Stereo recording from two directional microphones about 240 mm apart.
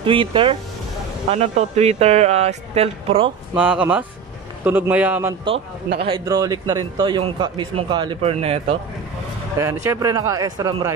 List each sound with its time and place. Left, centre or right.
0.0 s a man's voice: right
3.5 s speech: centre
5.9 s a man's voice: right
9.8 s speech: centre